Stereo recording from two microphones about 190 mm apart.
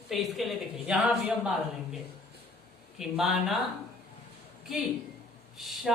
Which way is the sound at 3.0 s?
Centre (ahead or behind).